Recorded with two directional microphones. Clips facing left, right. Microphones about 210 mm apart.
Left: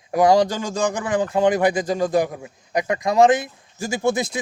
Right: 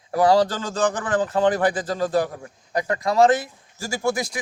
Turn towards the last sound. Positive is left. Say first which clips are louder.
# left 3 dB
turn(degrees=25)  # may be behind; listen again after turning